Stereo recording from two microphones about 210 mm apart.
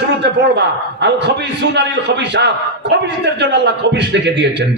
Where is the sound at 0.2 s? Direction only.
55° right (ahead or behind).